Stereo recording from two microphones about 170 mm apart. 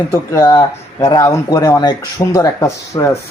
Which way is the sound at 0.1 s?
15° left (ahead or behind).